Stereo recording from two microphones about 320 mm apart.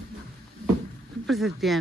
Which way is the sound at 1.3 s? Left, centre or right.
Centre.